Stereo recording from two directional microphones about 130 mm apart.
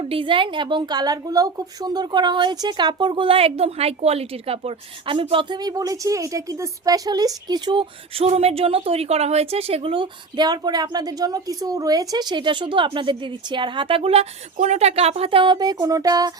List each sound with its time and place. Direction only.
0.0 s a woman's voice: 45° right (ahead or behind); by 16.3 s 30° right (ahead or behind)